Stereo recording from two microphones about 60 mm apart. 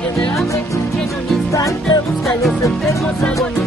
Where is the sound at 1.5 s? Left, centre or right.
Left.